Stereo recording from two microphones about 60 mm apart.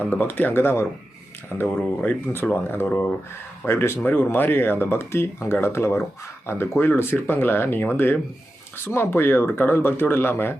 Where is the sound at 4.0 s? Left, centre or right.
Left.